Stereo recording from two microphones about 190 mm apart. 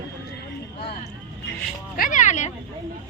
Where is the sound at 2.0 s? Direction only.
40° left (ahead or behind).